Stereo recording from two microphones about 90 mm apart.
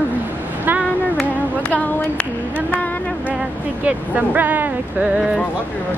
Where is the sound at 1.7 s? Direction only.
15° left (ahead or behind).